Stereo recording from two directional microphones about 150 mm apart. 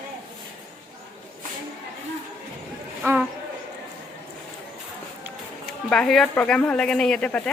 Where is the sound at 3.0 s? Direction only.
15° right (ahead or behind).